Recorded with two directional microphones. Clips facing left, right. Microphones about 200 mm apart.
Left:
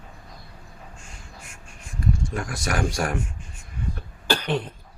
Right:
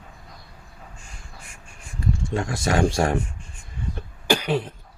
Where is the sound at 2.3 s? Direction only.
25° right (ahead or behind).